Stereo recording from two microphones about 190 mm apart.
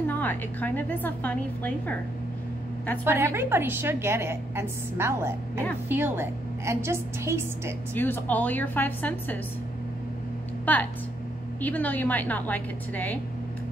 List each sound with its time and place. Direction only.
0.1 s a woman's voice: 10° left (ahead or behind)
3.1 s a woman's voice: 15° right (ahead or behind)
7.9 s a woman's voice: 10° left (ahead or behind)
10.6 s a woman's voice: 10° left (ahead or behind)